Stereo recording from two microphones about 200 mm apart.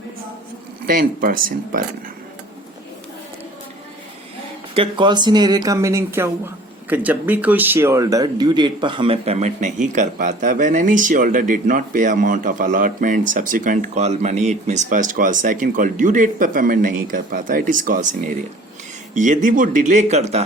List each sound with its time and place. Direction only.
0.9 s speech: 45° right (ahead or behind)
4.7 s speech: 25° right (ahead or behind)